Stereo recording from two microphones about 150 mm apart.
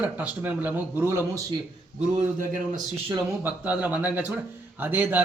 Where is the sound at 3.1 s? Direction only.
10° right (ahead or behind).